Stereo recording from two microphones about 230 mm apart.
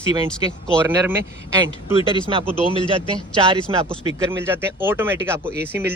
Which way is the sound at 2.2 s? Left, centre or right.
Right.